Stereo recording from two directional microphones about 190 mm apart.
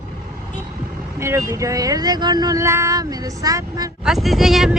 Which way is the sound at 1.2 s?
15° right (ahead or behind).